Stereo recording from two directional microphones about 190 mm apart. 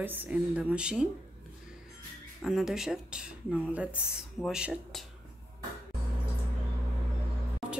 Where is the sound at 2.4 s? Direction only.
Centre (ahead or behind).